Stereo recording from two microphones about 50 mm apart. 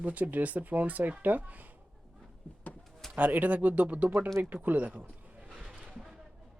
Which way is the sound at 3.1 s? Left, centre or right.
Right.